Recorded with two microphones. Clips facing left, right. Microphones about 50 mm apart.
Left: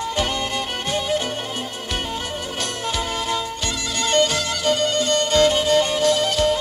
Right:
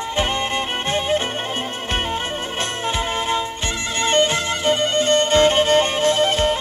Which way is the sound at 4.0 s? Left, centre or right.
Right.